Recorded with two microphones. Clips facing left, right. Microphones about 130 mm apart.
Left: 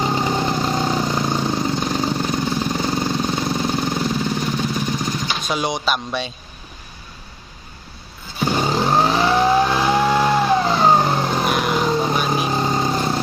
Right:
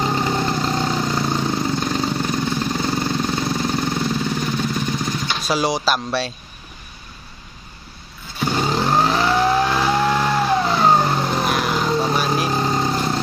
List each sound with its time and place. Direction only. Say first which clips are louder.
0.0 s vehicle: even; 5° left (ahead or behind)
2.5 s jackhammer: left 1 dB; 15° left (ahead or behind)
2.7 s jackhammer: even; 5° left (ahead or behind)
8.4 s vehicle: left 1 dB; 5° left (ahead or behind)